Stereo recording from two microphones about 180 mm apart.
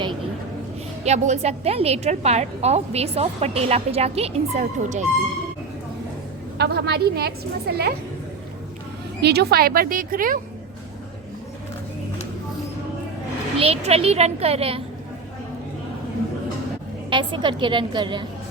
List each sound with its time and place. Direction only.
1.0 s a woman's voice: 40° right (ahead or behind)
6.6 s a woman's voice: 65° right (ahead or behind)
9.2 s a woman's voice: 65° right (ahead or behind)
13.6 s a woman's voice: 35° right (ahead or behind)
17.1 s a woman's voice: 25° right (ahead or behind)